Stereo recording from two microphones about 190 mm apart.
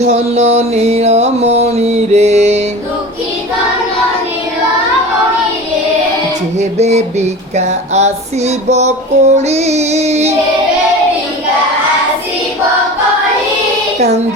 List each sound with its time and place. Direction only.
0.0 s music: 35° right (ahead or behind)
6.6 s music: 35° right (ahead or behind)